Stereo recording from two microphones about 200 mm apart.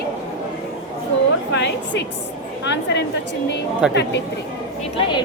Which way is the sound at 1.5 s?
60° left (ahead or behind).